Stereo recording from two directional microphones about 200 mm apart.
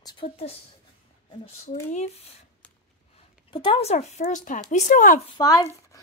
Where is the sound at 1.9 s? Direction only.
35° left (ahead or behind).